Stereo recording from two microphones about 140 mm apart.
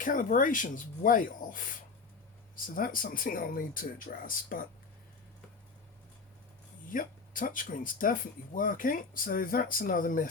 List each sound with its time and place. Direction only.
0.0 s speech: 70° left (ahead or behind)
6.9 s speech: 75° left (ahead or behind)